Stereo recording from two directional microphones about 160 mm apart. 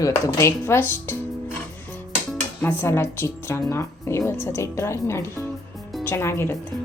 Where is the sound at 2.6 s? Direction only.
10° left (ahead or behind).